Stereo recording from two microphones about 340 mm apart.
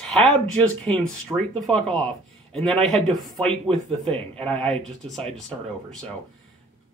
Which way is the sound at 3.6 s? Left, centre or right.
Centre.